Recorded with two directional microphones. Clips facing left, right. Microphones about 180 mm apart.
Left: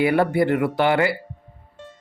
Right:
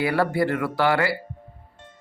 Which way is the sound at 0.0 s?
20° left (ahead or behind).